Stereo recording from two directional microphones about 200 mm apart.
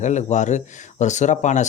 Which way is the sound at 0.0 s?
35° left (ahead or behind).